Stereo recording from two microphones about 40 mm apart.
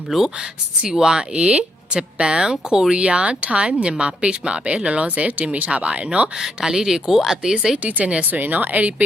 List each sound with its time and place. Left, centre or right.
0.3 s speech: centre
6.3 s speech: centre
7.8 s speech: right
8.0 s speech: right
8.3 s speech: right